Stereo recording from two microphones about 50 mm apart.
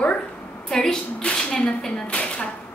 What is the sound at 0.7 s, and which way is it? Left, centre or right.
A woman's voice, centre.